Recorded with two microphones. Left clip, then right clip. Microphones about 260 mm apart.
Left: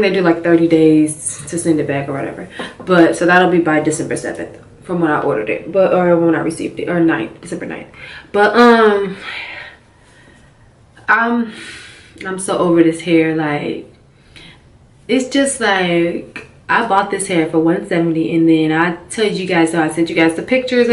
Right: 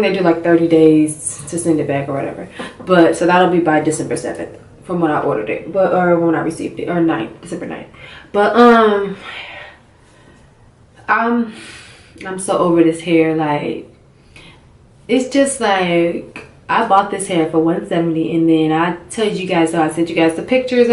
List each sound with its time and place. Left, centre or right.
0.0 s speech: centre
11.1 s speech: centre
15.0 s speech: centre